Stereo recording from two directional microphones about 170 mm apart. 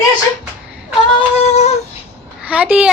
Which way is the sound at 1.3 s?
40° left (ahead or behind).